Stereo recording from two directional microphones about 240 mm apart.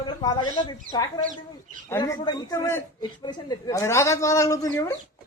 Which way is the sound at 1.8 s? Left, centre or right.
Centre.